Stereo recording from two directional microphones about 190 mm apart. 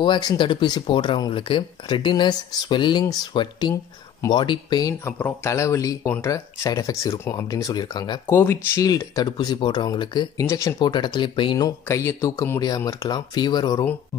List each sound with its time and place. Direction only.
0.0 s speech: 25° left (ahead or behind)